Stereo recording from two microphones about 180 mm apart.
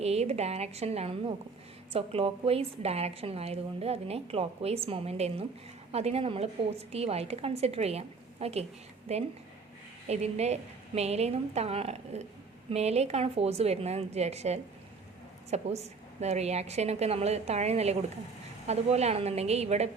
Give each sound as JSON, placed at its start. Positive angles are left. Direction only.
{"t": 0.0, "sound": "a woman's voice", "side_deg": -35}